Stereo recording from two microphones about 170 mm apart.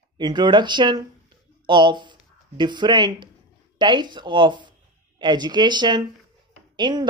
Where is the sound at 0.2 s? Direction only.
25° right (ahead or behind).